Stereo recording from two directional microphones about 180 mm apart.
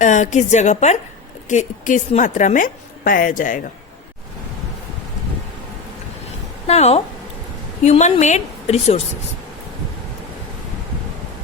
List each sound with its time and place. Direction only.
0.0 s a woman's voice: 40° left (ahead or behind)
6.7 s a woman's voice: 35° left (ahead or behind)